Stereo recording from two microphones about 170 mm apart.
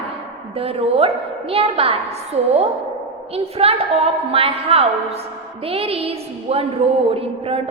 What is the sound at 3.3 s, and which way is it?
A woman's voice, 35° right (ahead or behind).